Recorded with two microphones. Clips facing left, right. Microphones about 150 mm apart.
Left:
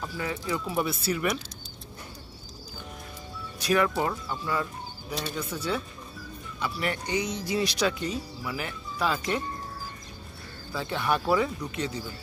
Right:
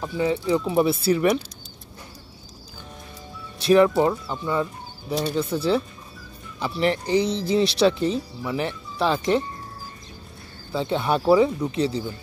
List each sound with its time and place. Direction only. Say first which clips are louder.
0.0 s speech: right 9 dB; 20° right (ahead or behind)
3.5 s speech: right 8 dB; 25° right (ahead or behind)
6.6 s speech: right 8 dB; 30° right (ahead or behind)
10.7 s speech: right 5 dB; 25° right (ahead or behind)